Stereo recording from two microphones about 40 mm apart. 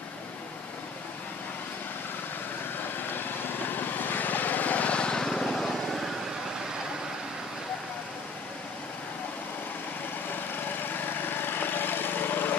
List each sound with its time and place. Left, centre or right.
3.2 s vehicle: left; by 5.8 s centre
10.8 s vehicle: left